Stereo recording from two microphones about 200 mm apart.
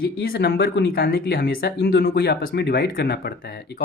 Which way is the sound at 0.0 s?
50° left (ahead or behind).